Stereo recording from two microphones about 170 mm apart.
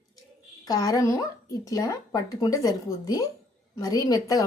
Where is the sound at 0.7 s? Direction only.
20° left (ahead or behind).